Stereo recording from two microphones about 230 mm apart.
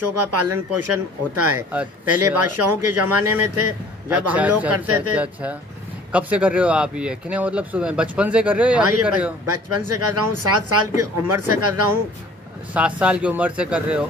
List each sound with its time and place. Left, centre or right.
0.0 s speech: right
4.3 s speech: centre
4.8 s speech: right
5.1 s speech: centre
9.5 s speech: right
12.7 s speech: centre